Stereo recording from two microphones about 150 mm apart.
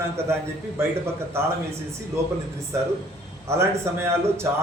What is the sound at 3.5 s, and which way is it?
Speech, 20° right (ahead or behind).